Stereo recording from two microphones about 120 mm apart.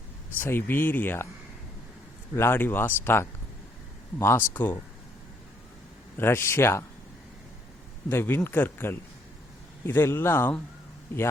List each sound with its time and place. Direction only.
0.3 s speech: 15° left (ahead or behind)
2.3 s speech: 20° left (ahead or behind)
6.1 s speech: 20° left (ahead or behind)
8.1 s speech: 20° left (ahead or behind)